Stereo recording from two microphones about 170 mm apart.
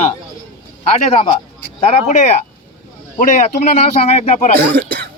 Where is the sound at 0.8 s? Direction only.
35° left (ahead or behind).